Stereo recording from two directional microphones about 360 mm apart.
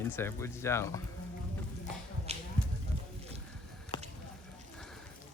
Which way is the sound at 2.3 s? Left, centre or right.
Centre.